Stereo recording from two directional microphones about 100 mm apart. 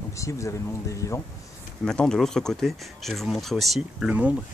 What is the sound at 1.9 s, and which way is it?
Speech, 5° left (ahead or behind).